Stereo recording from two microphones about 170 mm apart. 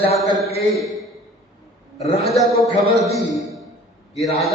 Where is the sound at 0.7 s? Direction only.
Centre (ahead or behind).